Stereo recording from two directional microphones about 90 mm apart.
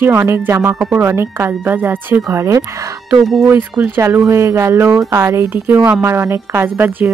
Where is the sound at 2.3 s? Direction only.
35° right (ahead or behind).